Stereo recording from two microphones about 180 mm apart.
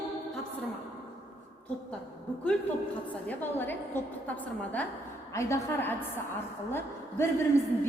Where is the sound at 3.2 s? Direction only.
10° left (ahead or behind).